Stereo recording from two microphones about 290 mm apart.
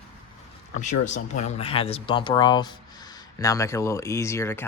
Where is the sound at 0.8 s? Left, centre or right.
Left.